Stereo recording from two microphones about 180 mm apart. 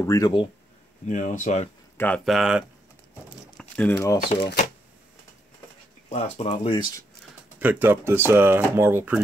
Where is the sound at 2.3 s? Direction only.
5° right (ahead or behind).